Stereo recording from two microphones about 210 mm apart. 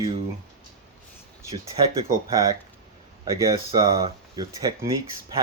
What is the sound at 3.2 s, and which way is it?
Speech, 15° right (ahead or behind).